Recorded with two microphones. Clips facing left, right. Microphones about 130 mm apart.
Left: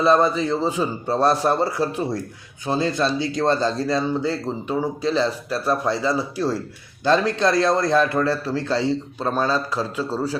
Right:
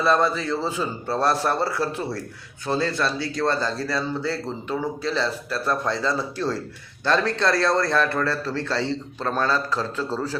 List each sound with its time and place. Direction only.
0.0 s a man's voice: 15° left (ahead or behind)